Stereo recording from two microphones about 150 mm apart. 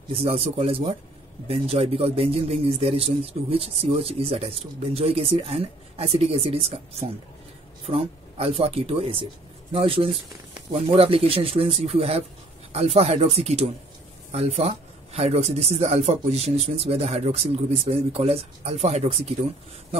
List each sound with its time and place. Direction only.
0.1 s speech: 40° right (ahead or behind)